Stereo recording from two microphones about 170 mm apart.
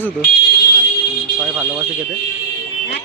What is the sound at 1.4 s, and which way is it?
Smoke detector, 5° right (ahead or behind).